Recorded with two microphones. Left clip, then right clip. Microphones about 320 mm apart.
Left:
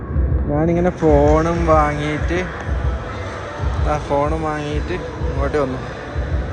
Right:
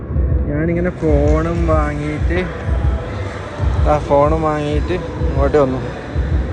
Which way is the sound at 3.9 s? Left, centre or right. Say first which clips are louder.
Right 6 dB; centre.